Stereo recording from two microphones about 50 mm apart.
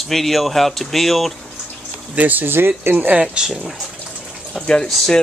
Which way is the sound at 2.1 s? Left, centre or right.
Right.